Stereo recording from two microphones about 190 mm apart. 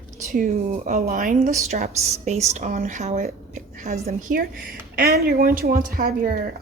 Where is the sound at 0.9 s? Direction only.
45° right (ahead or behind).